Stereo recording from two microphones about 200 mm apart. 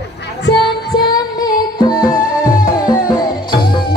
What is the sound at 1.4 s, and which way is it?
Music, 20° left (ahead or behind).